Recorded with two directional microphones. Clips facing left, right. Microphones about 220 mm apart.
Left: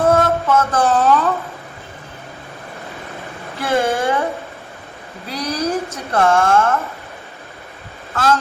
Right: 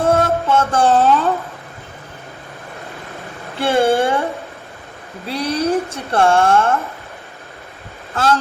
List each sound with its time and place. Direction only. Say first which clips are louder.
0.0 s a sound: left 1 dB; 30° right (ahead or behind)
3.6 s a woman's voice: right 3 dB; 30° right (ahead or behind)
5.3 s a woman's voice: right 3 dB; 30° right (ahead or behind)
8.1 s speech: even; 30° right (ahead or behind)